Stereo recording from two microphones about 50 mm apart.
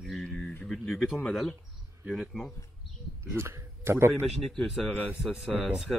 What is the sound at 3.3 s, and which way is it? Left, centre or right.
Speech, right.